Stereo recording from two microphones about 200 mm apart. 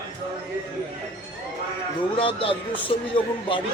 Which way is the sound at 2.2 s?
25° left (ahead or behind).